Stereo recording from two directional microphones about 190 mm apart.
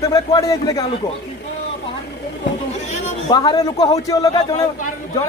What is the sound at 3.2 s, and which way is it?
Speech, 20° left (ahead or behind).